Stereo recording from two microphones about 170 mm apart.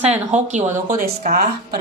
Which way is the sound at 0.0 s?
40° right (ahead or behind).